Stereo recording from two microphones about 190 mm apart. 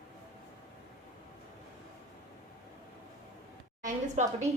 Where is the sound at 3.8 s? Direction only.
40° right (ahead or behind).